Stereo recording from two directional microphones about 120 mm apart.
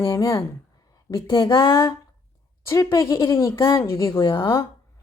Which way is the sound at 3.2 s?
45° left (ahead or behind).